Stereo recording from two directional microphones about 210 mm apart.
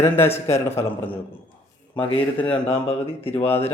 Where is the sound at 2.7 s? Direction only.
30° left (ahead or behind).